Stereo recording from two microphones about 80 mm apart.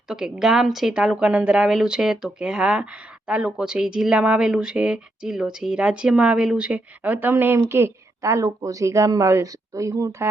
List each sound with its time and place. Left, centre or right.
0.1 s a woman's voice: centre; by 10.2 s right